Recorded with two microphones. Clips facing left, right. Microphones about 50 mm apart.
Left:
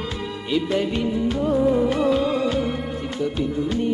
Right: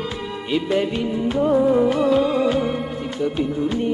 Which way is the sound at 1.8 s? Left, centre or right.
Centre.